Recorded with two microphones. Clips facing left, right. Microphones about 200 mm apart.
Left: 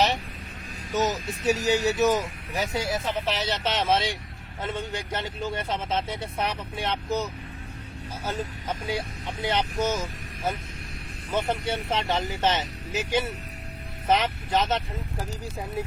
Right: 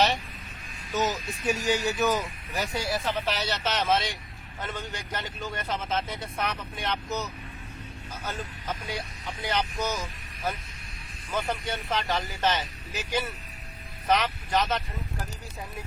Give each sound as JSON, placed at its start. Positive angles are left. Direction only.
{"t": 0.9, "sound": "a man's voice", "side_deg": 20}